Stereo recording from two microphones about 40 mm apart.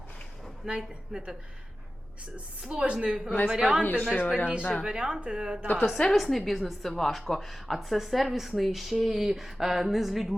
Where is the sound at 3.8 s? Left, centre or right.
Left.